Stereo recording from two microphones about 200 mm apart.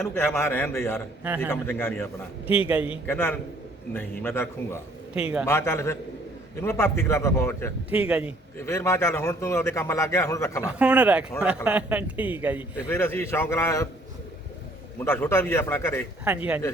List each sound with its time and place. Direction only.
0.0 s a man's voice: 10° left (ahead or behind)
2.5 s speech: 10° right (ahead or behind)
3.1 s a man's voice: 10° left (ahead or behind)
5.1 s speech: 5° right (ahead or behind)
5.5 s a man's voice: 15° left (ahead or behind)
7.9 s speech: 5° right (ahead or behind)
8.5 s a man's voice: 15° left (ahead or behind)
10.6 s speech: 5° right (ahead or behind)
12.9 s a man's voice: 10° left (ahead or behind)
14.9 s a man's voice: 10° left (ahead or behind)
16.3 s speech: 5° right (ahead or behind)